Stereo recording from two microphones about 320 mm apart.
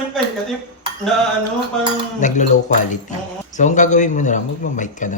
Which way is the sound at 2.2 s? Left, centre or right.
Left.